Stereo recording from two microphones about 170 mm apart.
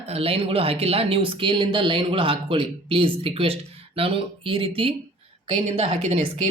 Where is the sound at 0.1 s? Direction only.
35° right (ahead or behind).